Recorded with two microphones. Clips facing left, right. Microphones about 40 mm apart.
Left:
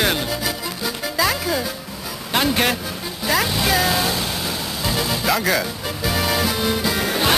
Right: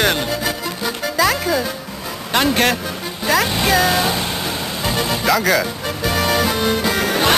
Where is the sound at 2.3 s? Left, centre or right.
Centre.